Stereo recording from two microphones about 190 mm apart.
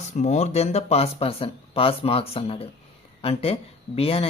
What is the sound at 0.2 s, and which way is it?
Speech, 35° left (ahead or behind).